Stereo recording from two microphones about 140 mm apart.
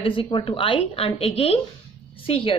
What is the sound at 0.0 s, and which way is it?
A woman's voice, 40° left (ahead or behind).